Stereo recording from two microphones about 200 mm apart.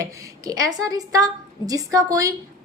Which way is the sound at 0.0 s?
20° right (ahead or behind).